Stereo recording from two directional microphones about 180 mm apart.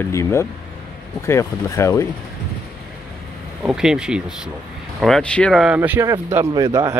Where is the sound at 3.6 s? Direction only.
5° right (ahead or behind); by 6.9 s 20° right (ahead or behind).